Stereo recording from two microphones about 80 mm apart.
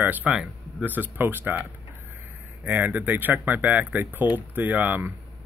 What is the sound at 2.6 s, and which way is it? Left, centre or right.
Speech, right.